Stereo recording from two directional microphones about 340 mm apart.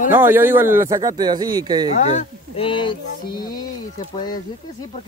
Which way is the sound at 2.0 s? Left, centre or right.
Left.